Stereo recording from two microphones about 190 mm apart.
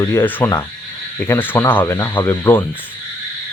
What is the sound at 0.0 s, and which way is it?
Speech, 15° left (ahead or behind).